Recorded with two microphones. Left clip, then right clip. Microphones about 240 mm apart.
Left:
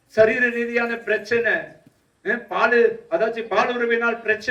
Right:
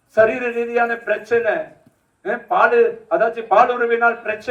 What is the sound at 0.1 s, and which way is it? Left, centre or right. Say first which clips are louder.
A man's voice: right 1 dB; centre.